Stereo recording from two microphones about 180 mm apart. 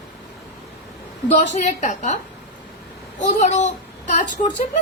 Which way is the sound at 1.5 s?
40° left (ahead or behind).